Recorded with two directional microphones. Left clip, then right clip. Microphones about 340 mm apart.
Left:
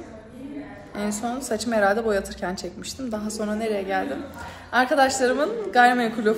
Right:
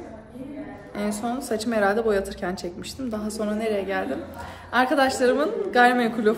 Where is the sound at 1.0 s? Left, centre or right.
Centre.